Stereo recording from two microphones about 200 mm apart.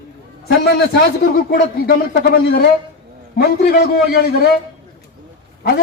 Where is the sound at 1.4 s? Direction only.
45° left (ahead or behind).